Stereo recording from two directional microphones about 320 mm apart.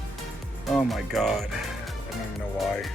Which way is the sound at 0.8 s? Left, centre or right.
Centre.